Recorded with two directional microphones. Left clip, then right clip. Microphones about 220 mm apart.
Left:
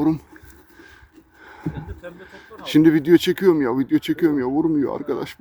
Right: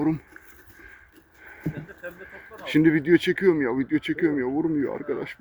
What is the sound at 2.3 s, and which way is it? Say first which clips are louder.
Speech: left 5 dB; 15° left (ahead or behind).